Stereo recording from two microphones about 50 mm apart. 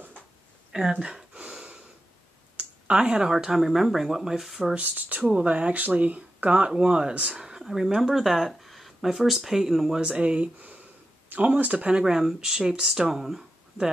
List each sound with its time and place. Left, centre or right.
0.7 s a sound: centre
3.3 s speech: centre
4.7 s speech: right; by 9.9 s centre
10.1 s speech: right
12.0 s speech: centre